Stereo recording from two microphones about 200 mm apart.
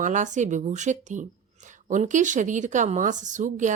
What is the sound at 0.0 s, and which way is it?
Speech, 40° right (ahead or behind).